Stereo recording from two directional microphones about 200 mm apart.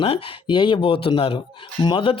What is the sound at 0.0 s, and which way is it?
Speech, 25° left (ahead or behind).